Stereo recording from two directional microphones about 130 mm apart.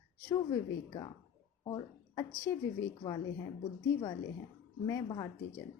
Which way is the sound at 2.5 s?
25° left (ahead or behind).